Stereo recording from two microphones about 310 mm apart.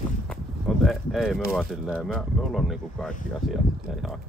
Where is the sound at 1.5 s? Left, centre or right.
Centre.